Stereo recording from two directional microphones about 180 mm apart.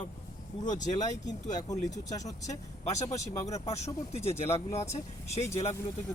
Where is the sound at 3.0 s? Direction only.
40° left (ahead or behind).